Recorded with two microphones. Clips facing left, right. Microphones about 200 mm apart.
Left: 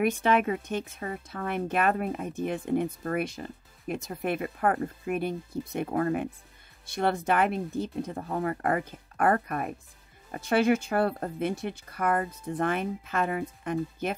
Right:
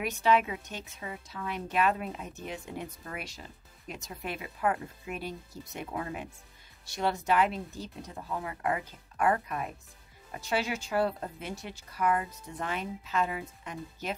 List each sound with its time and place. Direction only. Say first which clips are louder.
0.0 s speech: left 3 dB; 50° left (ahead or behind)